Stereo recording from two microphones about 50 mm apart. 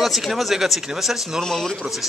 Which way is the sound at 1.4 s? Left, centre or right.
Centre.